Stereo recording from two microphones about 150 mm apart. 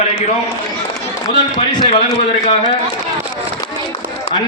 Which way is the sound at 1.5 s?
30° left (ahead or behind).